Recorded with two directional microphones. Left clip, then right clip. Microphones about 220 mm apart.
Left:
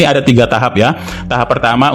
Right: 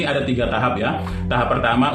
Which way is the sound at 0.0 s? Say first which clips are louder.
Left 11 dB; 50° left (ahead or behind).